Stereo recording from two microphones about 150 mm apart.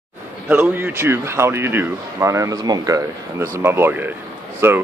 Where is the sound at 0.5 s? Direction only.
10° right (ahead or behind).